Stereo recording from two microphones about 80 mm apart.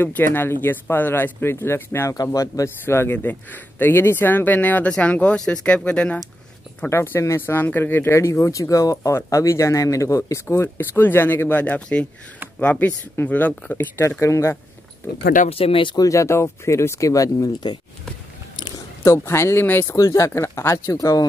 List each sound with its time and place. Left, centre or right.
0.0 s speech: left
2.3 s speech: left
2.8 s speech: left
6.9 s speech: left
10.5 s speech: left
15.7 s speech: left
16.0 s speech: left
19.0 s speech: left
20.0 s speech: left